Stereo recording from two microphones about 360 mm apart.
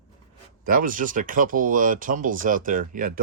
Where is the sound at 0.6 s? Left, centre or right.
Right.